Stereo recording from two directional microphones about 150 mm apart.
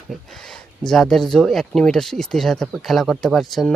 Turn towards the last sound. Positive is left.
turn(degrees=0)  # may be behind; listen again after turning